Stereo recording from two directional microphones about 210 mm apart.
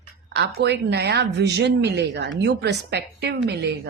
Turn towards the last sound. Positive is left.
turn(degrees=-55)  # may be behind; listen again after turning